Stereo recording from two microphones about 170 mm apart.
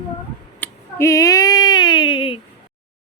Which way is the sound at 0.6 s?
15° left (ahead or behind).